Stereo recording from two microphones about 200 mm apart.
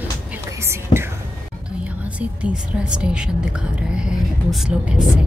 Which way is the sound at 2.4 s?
5° right (ahead or behind).